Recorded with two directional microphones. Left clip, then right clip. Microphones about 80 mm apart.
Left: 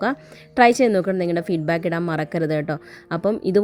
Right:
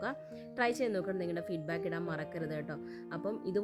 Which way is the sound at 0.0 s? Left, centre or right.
Left.